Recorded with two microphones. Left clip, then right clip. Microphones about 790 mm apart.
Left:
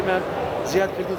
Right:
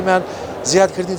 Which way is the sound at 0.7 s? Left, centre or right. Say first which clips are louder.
Right 10 dB; right.